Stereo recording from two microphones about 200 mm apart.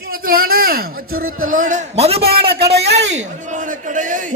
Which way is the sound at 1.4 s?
40° right (ahead or behind).